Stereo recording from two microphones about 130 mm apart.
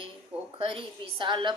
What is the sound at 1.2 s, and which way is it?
Speech, 35° right (ahead or behind).